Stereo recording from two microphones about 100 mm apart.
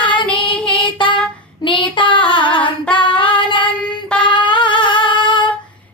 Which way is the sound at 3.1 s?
55° left (ahead or behind).